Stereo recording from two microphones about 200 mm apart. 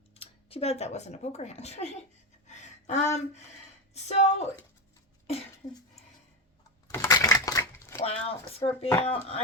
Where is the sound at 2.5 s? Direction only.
35° left (ahead or behind).